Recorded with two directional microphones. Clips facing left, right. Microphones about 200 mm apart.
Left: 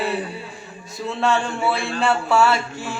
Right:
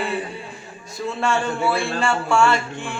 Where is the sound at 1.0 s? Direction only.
Centre (ahead or behind).